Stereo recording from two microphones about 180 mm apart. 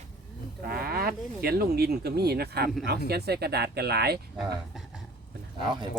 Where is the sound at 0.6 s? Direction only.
55° right (ahead or behind).